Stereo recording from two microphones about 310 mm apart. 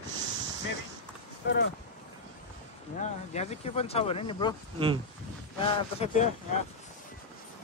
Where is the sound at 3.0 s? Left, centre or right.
Left.